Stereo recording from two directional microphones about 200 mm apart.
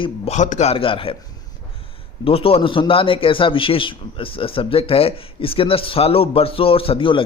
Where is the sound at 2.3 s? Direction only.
30° left (ahead or behind).